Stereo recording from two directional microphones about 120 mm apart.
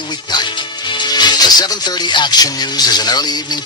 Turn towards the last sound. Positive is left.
turn(degrees=35)  # may be behind; listen again after turning